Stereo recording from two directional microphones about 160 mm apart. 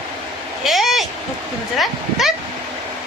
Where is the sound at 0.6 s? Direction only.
Centre (ahead or behind).